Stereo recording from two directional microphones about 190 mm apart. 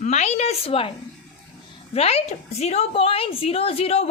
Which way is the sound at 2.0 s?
35° left (ahead or behind).